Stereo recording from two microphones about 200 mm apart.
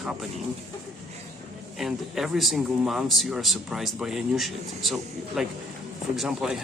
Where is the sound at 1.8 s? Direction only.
Centre (ahead or behind).